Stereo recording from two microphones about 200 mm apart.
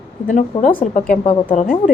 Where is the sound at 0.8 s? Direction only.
40° left (ahead or behind).